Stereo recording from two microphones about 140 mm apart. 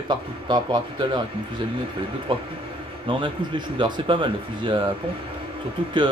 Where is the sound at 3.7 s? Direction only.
35° right (ahead or behind).